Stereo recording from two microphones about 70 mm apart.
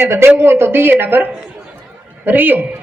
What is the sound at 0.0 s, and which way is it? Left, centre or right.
A man's voice, right.